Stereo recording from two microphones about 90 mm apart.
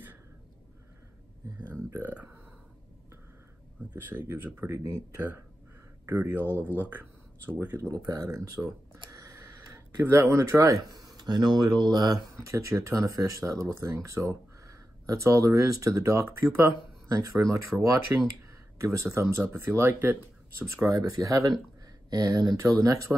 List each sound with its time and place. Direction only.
2.0 s speech: 20° right (ahead or behind)
3.9 s speech: 20° right (ahead or behind)
7.9 s a sound: 40° right (ahead or behind)
10.1 s speech: 25° right (ahead or behind); by 12.4 s 45° right (ahead or behind)
12.4 s speech: 35° right (ahead or behind)
20.9 s speech: 40° right (ahead or behind)